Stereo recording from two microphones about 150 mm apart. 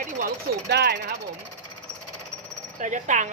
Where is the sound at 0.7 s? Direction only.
90° right.